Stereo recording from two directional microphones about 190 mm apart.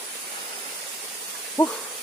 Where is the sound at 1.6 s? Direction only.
10° left (ahead or behind).